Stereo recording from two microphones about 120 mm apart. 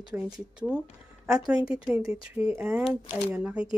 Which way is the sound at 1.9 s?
25° right (ahead or behind).